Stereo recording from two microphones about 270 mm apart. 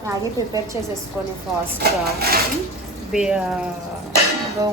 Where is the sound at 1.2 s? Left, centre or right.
Centre.